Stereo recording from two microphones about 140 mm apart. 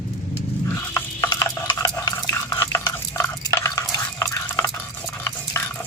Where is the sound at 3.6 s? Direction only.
20° left (ahead or behind).